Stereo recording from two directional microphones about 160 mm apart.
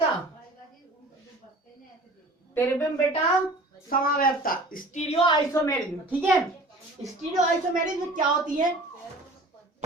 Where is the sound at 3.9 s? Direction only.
65° left (ahead or behind).